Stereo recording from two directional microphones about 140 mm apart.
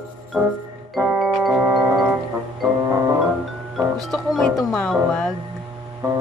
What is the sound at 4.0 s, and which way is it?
Music, centre (ahead or behind).